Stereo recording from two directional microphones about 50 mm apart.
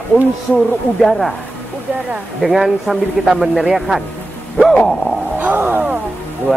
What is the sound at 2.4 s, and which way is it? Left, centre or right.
Speech, centre.